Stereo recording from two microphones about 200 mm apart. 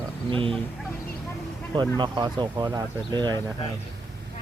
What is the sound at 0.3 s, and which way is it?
Speech, 25° right (ahead or behind).